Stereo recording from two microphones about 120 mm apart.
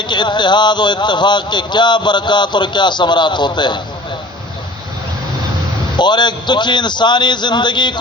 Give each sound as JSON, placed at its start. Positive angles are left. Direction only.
{"t": 0.0, "sound": "speech", "side_deg": 40}
{"t": 6.0, "sound": "speech", "side_deg": 40}